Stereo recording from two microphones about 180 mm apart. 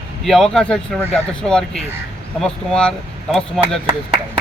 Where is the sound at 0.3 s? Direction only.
Centre (ahead or behind).